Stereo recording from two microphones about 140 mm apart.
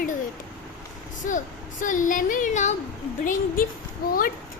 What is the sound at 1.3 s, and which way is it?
Speech, 70° left (ahead or behind).